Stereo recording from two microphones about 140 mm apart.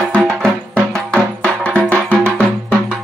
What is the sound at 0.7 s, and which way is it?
Music, 5° left (ahead or behind).